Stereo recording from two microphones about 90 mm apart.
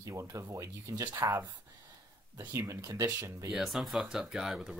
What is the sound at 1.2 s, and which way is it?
Speech, 25° right (ahead or behind).